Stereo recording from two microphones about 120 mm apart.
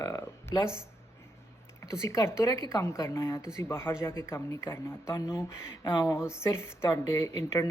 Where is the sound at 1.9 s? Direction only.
25° left (ahead or behind).